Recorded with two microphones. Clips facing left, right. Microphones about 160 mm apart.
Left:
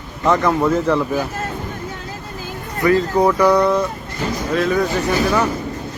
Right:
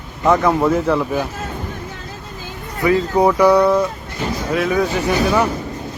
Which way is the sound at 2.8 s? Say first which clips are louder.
Even; 15° right (ahead or behind).